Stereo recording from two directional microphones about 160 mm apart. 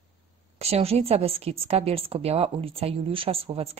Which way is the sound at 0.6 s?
40° right (ahead or behind).